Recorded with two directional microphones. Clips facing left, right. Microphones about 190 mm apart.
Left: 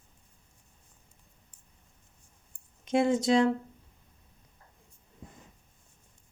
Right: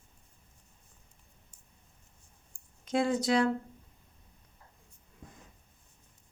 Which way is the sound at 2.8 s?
20° left (ahead or behind).